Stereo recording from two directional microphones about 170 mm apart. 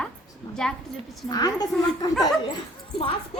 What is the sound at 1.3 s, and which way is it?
Speech, 20° left (ahead or behind).